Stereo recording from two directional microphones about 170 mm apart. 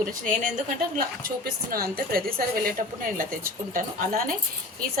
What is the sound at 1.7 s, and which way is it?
A woman's voice, 60° right (ahead or behind).